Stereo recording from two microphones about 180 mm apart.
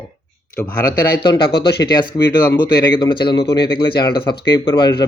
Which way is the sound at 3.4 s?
65° left (ahead or behind).